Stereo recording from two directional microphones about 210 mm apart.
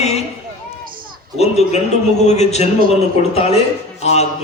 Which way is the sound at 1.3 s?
30° left (ahead or behind).